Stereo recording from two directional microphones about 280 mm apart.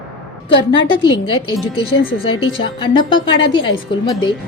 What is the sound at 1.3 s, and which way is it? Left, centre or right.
Speech, centre.